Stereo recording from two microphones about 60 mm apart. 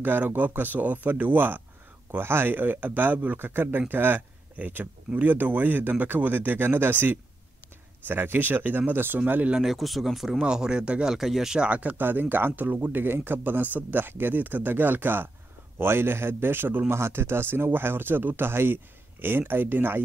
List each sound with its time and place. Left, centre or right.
0.0 s speech: right
9.2 s speech: right
9.6 s speech: centre
10.4 s speech: centre
11.1 s speech: centre; by 20.0 s right